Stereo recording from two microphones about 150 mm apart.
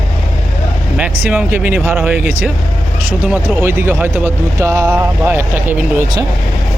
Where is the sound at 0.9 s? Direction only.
10° right (ahead or behind).